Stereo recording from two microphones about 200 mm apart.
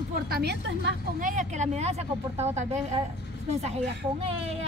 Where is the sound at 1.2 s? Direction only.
35° right (ahead or behind).